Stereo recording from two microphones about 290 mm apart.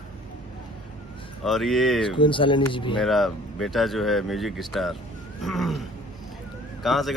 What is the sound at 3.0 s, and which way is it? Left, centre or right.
A man's voice, centre.